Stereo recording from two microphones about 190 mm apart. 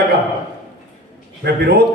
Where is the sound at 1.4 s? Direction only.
60° right (ahead or behind).